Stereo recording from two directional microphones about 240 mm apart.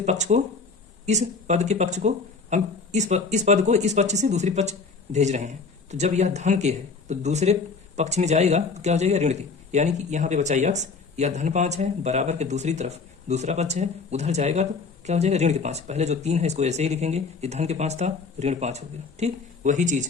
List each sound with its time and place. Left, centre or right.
0.0 s speech: right